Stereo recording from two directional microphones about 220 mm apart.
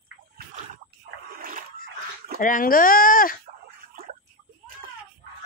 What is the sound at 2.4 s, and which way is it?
Speech, 40° left (ahead or behind).